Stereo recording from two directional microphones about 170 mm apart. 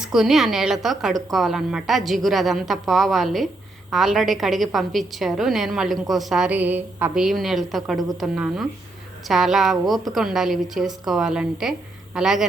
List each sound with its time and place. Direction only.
0.0 s a woman's voice: 5° right (ahead or behind)